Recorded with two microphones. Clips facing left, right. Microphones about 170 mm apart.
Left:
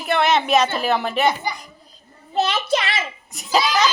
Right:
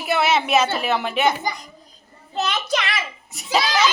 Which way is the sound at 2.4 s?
30° left (ahead or behind).